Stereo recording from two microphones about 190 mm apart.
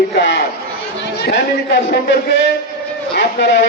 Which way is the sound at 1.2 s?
65° left (ahead or behind).